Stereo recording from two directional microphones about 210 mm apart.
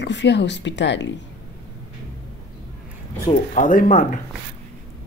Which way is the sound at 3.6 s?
40° left (ahead or behind).